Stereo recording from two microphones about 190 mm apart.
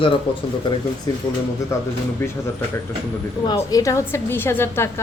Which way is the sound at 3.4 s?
20° left (ahead or behind).